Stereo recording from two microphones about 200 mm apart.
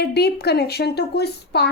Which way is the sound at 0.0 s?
55° left (ahead or behind).